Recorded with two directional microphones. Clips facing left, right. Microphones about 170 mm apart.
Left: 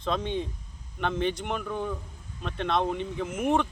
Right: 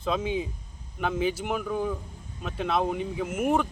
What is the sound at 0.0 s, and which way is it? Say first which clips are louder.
Speech: right 1 dB; 5° right (ahead or behind).